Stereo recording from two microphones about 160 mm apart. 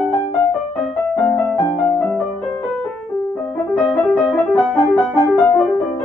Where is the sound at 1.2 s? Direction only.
10° left (ahead or behind).